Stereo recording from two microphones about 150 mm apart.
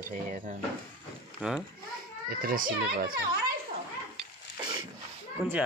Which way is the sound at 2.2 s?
70° right (ahead or behind).